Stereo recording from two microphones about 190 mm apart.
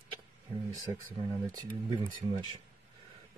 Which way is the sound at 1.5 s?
20° right (ahead or behind).